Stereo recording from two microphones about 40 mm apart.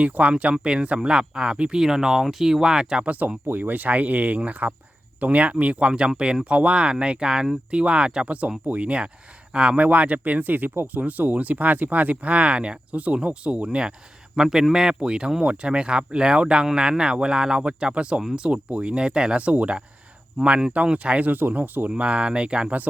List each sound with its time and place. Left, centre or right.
0.1 s speech: right
1.8 s speech: centre
3.1 s speech: right
5.9 s speech: right
8.6 s speech: right
14.3 s speech: centre